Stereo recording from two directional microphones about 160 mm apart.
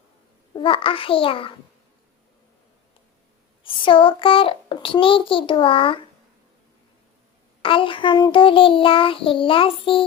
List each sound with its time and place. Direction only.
0.5 s child singing: 35° left (ahead or behind)
3.6 s child singing: 35° left (ahead or behind)
7.6 s child singing: 35° left (ahead or behind)